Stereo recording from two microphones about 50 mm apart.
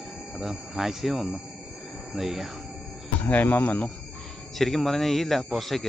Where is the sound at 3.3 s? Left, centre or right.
Left.